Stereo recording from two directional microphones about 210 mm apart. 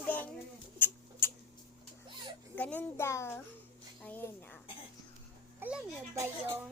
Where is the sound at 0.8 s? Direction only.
10° left (ahead or behind).